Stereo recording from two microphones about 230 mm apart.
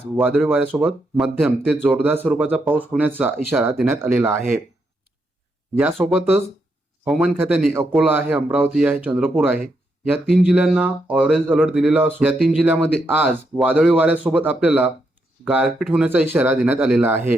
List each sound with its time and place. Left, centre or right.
0.0 s speech: centre
5.7 s speech: centre